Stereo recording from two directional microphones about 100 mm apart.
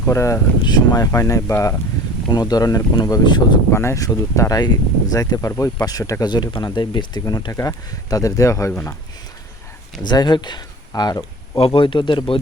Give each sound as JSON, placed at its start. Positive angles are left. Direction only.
{"t": 0.0, "sound": "speech", "side_deg": 30}
{"t": 0.6, "sound": "speech", "side_deg": 45}
{"t": 1.0, "sound": "speech", "side_deg": 35}
{"t": 3.7, "sound": "speech", "side_deg": 25}
{"t": 7.2, "sound": "speech", "side_deg": 40}
{"t": 10.1, "sound": "speech", "side_deg": 45}
{"t": 11.5, "sound": "speech", "side_deg": 65}